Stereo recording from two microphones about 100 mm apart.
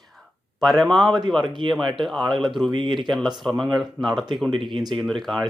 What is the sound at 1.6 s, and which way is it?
Speech, 55° right (ahead or behind).